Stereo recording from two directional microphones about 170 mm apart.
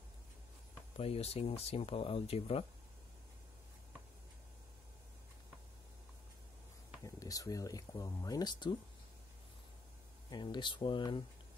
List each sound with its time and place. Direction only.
0.9 s speech: 35° left (ahead or behind)
7.2 s speech: 20° left (ahead or behind)
10.3 s speech: 25° left (ahead or behind)